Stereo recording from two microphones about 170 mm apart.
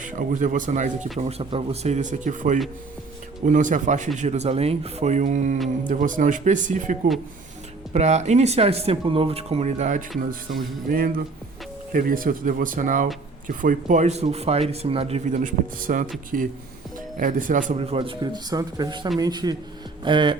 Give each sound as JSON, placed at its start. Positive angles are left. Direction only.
{"t": 0.0, "sound": "speech", "side_deg": -50}
{"t": 10.8, "sound": "speech", "side_deg": -55}
{"t": 17.7, "sound": "speech", "side_deg": -35}